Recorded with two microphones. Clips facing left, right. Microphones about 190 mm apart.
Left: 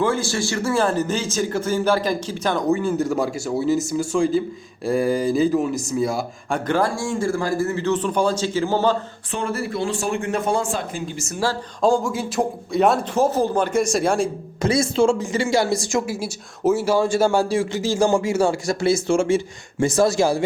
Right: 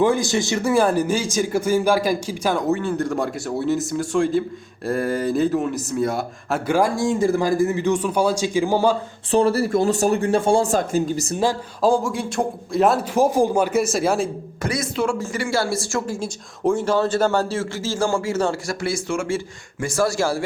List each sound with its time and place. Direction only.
0.0 s speech: 15° right (ahead or behind)
9.3 s speech: 35° right (ahead or behind)
10.7 s speech: 40° right (ahead or behind)
11.8 s speech: centre (ahead or behind)
13.1 s speech: 10° right (ahead or behind)
14.6 s a woman's voice: 25° left (ahead or behind)